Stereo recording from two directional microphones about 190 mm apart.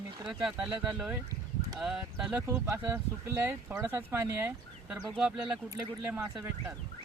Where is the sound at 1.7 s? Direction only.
5° right (ahead or behind).